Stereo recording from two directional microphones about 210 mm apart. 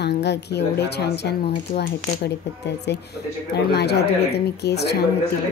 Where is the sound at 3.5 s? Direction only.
50° left (ahead or behind).